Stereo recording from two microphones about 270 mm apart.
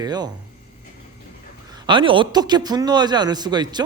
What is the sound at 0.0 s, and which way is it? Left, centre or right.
Speech, centre.